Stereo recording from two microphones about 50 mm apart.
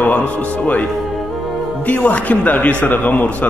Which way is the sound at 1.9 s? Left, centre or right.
Left.